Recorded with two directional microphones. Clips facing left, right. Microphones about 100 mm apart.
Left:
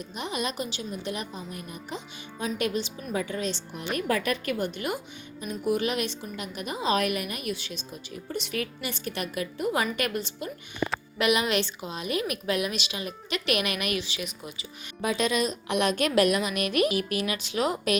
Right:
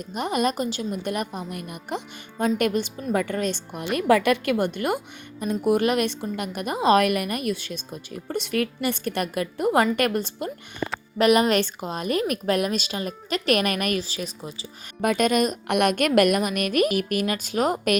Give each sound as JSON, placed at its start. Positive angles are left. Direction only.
{"t": 0.0, "sound": "a woman's voice", "side_deg": -50}
{"t": 3.9, "sound": "a woman's voice", "side_deg": -90}
{"t": 15.0, "sound": "a woman's voice", "side_deg": -55}